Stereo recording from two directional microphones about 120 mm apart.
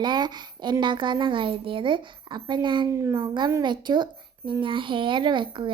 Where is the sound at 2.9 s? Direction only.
30° right (ahead or behind).